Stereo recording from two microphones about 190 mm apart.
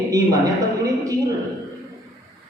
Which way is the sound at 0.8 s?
20° right (ahead or behind).